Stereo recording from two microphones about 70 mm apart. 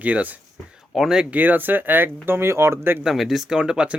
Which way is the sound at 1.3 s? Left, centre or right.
Right.